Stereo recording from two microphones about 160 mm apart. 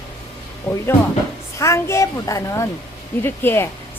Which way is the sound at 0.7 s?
5° left (ahead or behind).